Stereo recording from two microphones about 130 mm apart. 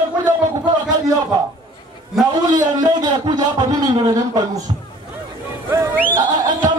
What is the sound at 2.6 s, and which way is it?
A man's voice, 35° right (ahead or behind).